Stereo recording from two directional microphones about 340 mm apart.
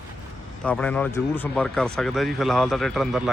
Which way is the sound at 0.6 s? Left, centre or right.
Centre.